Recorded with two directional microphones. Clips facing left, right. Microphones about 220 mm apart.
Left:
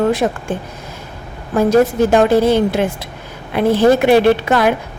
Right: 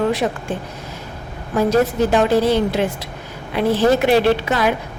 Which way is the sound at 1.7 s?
50° left (ahead or behind).